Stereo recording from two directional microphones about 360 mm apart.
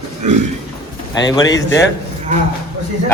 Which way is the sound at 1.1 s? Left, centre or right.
Centre.